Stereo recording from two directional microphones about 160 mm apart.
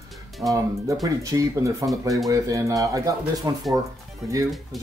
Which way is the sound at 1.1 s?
20° right (ahead or behind).